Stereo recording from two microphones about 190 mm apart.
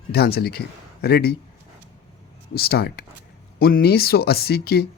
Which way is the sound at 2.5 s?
55° left (ahead or behind).